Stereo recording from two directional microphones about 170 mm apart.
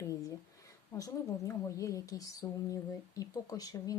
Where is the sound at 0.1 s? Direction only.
20° left (ahead or behind).